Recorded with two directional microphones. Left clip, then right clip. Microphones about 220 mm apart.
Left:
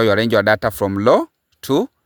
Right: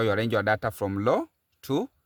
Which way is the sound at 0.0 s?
40° left (ahead or behind).